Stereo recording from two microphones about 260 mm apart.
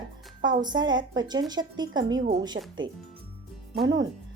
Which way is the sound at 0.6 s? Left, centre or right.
Centre.